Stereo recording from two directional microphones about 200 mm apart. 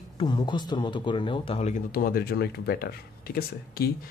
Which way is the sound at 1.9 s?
50° left (ahead or behind).